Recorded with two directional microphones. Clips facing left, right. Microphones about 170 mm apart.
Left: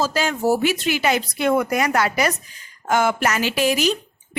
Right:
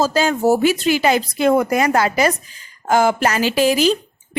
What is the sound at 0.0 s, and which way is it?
A woman's voice, 40° right (ahead or behind).